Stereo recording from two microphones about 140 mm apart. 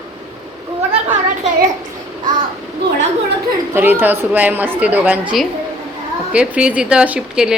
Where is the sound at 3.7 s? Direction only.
15° right (ahead or behind).